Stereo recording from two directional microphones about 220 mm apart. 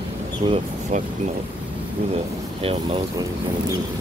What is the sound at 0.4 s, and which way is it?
Speech, 25° right (ahead or behind).